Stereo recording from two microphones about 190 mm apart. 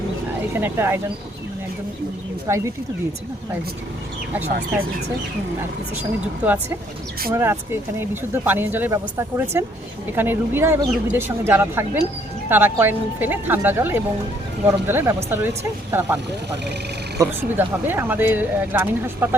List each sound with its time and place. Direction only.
0.5 s speech: 10° right (ahead or behind)
2.5 s speech: 15° right (ahead or behind)
6.4 s speech: 10° right (ahead or behind)
17.2 s speech: 10° right (ahead or behind)